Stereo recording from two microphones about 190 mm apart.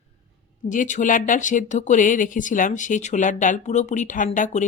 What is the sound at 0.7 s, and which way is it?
Speech, 40° left (ahead or behind).